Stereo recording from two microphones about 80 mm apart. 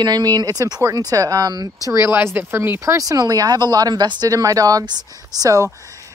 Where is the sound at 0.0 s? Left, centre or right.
Right.